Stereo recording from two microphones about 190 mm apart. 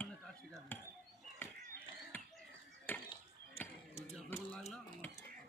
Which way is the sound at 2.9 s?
10° left (ahead or behind).